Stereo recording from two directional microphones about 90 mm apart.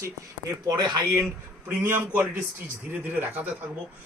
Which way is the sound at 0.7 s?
55° right (ahead or behind).